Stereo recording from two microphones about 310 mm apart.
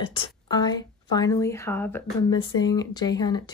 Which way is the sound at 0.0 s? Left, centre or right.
Centre.